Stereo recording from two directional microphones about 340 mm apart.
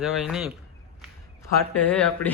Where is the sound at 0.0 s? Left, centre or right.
Centre.